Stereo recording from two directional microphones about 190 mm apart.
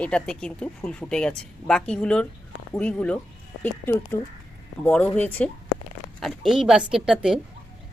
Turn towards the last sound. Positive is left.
turn(degrees=0)  # may be behind; listen again after turning